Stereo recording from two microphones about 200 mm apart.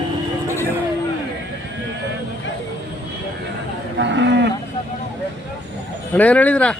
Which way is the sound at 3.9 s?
60° right (ahead or behind).